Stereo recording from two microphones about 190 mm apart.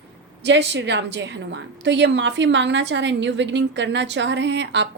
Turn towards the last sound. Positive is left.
turn(degrees=-65)  # may be behind; listen again after turning